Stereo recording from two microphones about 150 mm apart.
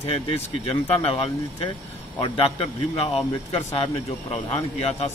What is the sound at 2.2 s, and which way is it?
Speech, 40° left (ahead or behind).